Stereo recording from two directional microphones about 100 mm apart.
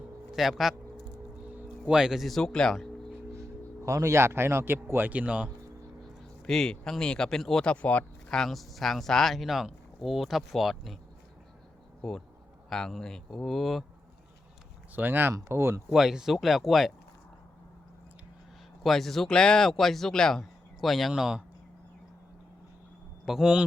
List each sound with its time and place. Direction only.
0.3 s speech: centre (ahead or behind)
1.8 s speech: 5° right (ahead or behind)
3.3 s speech: 30° right (ahead or behind); by 5.5 s 10° right (ahead or behind)
6.4 s speech: 5° left (ahead or behind)
12.7 s speech: 5° left (ahead or behind)
14.9 s speech: 20° right (ahead or behind)
15.3 s speech: 30° right (ahead or behind)
15.9 s speech: 5° right (ahead or behind)
18.8 s speech: centre (ahead or behind)
23.2 s speech: 5° right (ahead or behind)